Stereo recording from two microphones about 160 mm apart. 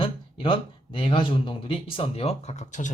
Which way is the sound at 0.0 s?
35° left (ahead or behind).